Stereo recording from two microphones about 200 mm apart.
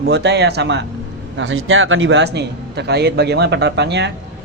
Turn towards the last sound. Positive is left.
turn(degrees=-60)  # may be behind; listen again after turning